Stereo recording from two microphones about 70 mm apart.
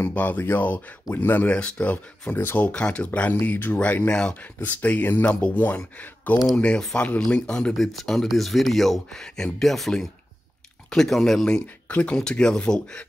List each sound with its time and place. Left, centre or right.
0.0 s speech: left
1.5 s speech: centre
2.3 s speech: left
2.6 s speech: centre
7.7 s speech: centre
11.6 s speech: centre
12.2 s speech: centre